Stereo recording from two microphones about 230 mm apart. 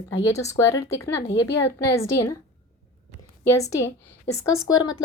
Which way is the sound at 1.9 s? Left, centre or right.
Centre.